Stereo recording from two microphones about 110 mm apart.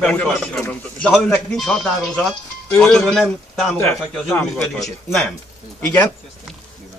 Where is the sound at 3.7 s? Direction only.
25° left (ahead or behind).